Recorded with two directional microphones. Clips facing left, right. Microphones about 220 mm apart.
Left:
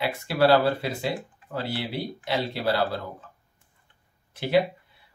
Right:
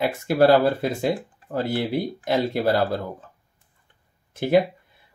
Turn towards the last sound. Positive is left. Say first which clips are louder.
# right 4 dB
turn(degrees=-50)  # may be behind; listen again after turning